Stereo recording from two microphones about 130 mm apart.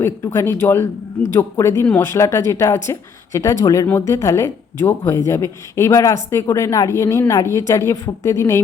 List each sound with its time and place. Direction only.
0.3 s speech: 15° left (ahead or behind)